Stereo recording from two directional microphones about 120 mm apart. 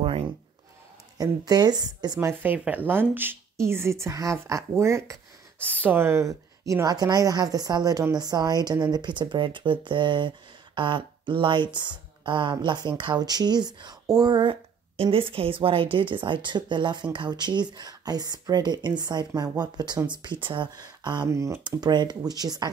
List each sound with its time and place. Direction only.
1.1 s a woman's voice: 30° right (ahead or behind)
2.1 s speech: 15° right (ahead or behind)
5.7 s a woman's voice: 15° right (ahead or behind); by 21.3 s 35° right (ahead or behind)
21.3 s speech: 25° right (ahead or behind)
21.6 s a woman's voice: 35° right (ahead or behind)